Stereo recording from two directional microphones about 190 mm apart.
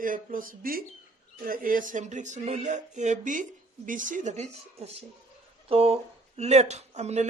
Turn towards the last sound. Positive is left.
turn(degrees=-35)  # may be behind; listen again after turning